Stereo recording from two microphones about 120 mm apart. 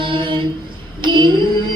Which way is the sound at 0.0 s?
45° right (ahead or behind).